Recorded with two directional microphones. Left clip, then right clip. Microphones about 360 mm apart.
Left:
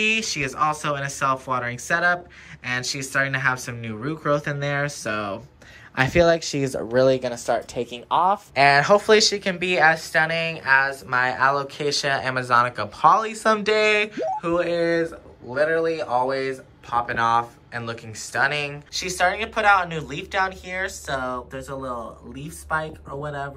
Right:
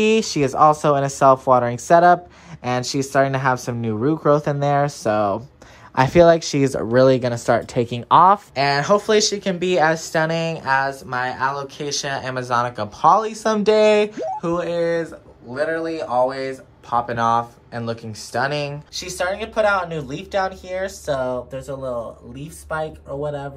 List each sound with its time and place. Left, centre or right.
0.0 s speech: centre
6.7 s speech: right
8.5 s speech: centre
21.2 s speech: centre